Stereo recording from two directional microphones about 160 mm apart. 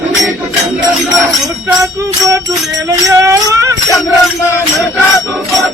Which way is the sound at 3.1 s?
20° right (ahead or behind).